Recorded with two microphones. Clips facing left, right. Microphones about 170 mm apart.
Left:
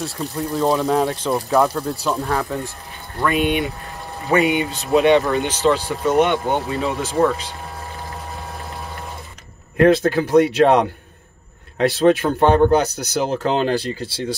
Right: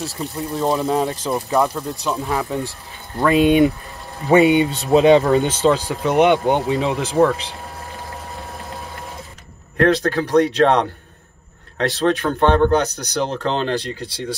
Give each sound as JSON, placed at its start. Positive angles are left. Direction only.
{"t": 0.0, "sound": "speech", "side_deg": 0}
{"t": 2.2, "sound": "speech", "side_deg": -15}
{"t": 4.3, "sound": "speech", "side_deg": -25}
{"t": 5.9, "sound": "speech", "side_deg": -15}
{"t": 9.8, "sound": "speech", "side_deg": 5}